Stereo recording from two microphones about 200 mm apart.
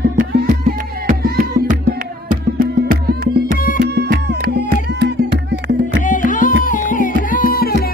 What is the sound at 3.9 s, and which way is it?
Music, 55° right (ahead or behind).